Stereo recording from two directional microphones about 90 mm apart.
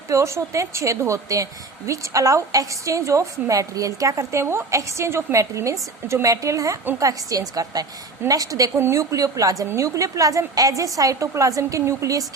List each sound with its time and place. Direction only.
0.1 s a woman's voice: 35° right (ahead or behind)